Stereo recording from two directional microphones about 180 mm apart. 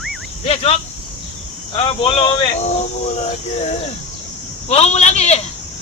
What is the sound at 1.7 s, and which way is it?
A man's voice, 30° left (ahead or behind).